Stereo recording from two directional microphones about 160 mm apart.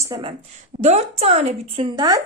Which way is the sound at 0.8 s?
45° right (ahead or behind).